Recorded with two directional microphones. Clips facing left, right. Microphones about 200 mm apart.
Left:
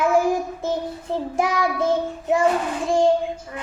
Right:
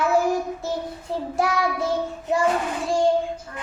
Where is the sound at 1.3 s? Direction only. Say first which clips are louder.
Left 1 dB; 20° left (ahead or behind).